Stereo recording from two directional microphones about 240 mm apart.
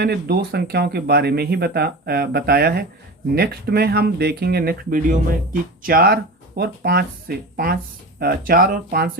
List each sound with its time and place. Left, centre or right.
0.0 s speech: right